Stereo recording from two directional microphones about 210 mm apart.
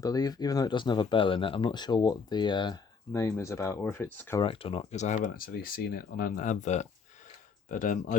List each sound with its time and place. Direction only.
0.0 s speech: 20° left (ahead or behind)
4.4 s speech: 25° left (ahead or behind)